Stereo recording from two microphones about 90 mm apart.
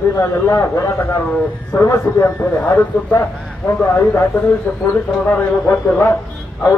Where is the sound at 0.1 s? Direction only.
35° left (ahead or behind).